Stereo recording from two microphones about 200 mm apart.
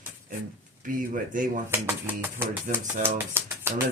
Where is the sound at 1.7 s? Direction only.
10° right (ahead or behind).